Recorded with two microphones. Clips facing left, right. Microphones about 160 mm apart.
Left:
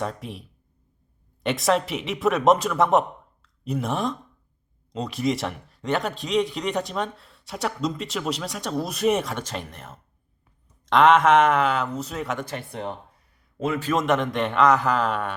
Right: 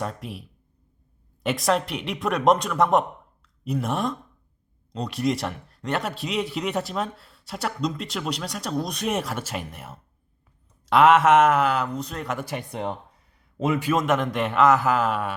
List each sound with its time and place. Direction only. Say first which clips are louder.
0.0 s a man's voice: left 1 dB; centre (ahead or behind)
12.5 s speech: right 2 dB; 15° right (ahead or behind)
13.9 s a man's voice: left 4 dB; centre (ahead or behind)